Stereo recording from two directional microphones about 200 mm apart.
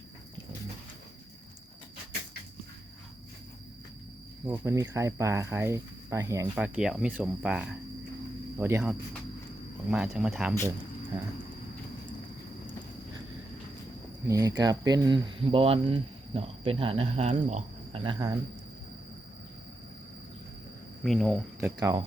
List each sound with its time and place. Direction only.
4.4 s speech: 15° right (ahead or behind)
6.6 s speech: 5° right (ahead or behind)
8.8 s speech: centre (ahead or behind)
14.3 s speech: 15° right (ahead or behind)
21.0 s speech: centre (ahead or behind)
21.6 s speech: 15° right (ahead or behind)